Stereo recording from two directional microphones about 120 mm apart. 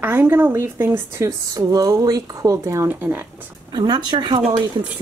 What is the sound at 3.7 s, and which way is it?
Speech, 35° right (ahead or behind).